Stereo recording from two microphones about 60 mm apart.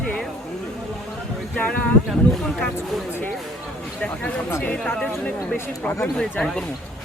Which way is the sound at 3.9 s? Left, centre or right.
Centre.